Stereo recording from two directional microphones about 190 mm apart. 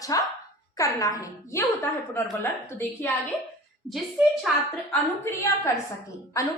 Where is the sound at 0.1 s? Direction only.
20° left (ahead or behind).